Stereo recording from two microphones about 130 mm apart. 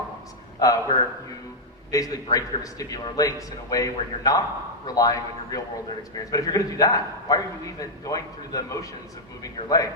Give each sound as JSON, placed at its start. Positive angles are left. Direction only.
{"t": 0.6, "sound": "a man's voice", "side_deg": 30}